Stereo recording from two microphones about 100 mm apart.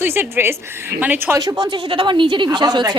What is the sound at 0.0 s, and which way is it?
Speech, 25° right (ahead or behind).